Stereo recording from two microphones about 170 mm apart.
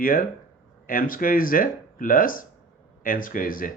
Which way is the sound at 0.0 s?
55° left (ahead or behind).